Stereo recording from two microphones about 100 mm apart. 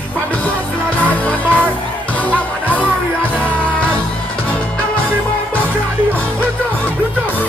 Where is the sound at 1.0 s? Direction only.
15° left (ahead or behind).